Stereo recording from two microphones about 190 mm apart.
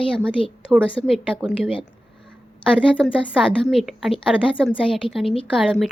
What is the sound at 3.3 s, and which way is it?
A woman's voice, centre (ahead or behind).